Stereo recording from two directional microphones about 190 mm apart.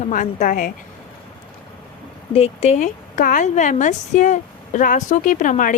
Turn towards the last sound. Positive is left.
turn(degrees=45)  # may be behind; listen again after turning